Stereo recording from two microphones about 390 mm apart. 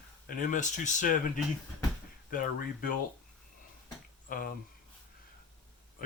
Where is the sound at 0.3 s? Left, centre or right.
Left.